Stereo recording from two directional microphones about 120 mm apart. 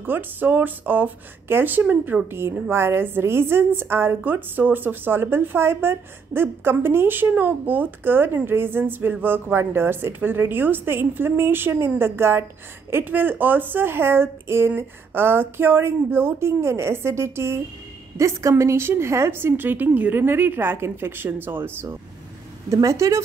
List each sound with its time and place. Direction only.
0.0 s speech: 15° right (ahead or behind)